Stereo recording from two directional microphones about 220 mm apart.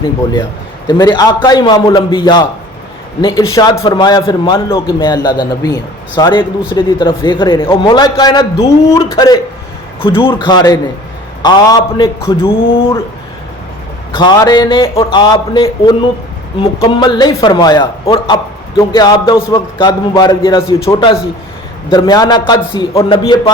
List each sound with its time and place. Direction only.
0.9 s a man's voice: 20° left (ahead or behind)
12.5 s a man's voice: 25° left (ahead or behind)
14.1 s a man's voice: 20° left (ahead or behind)